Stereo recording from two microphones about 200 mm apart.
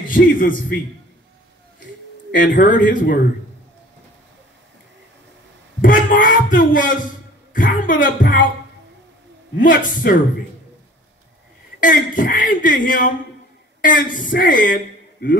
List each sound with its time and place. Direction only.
0.1 s speech: 40° left (ahead or behind)
2.3 s speech: 40° left (ahead or behind)
5.8 s speech: 45° left (ahead or behind)
9.6 s speech: 45° left (ahead or behind)
12.2 s a woman's voice: 40° left (ahead or behind)